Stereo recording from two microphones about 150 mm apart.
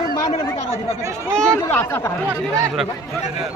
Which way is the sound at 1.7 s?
15° left (ahead or behind).